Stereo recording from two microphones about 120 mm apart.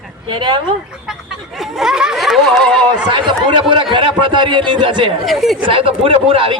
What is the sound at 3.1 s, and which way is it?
Speech, 40° right (ahead or behind).